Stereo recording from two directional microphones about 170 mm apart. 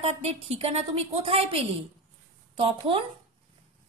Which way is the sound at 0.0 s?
40° right (ahead or behind).